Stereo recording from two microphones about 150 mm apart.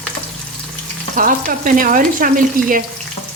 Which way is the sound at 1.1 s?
65° right (ahead or behind).